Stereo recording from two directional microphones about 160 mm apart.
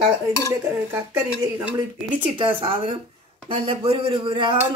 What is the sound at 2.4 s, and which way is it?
A man's voice, 35° right (ahead or behind).